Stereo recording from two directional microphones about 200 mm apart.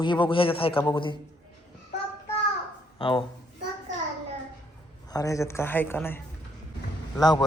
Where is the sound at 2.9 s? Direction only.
25° left (ahead or behind).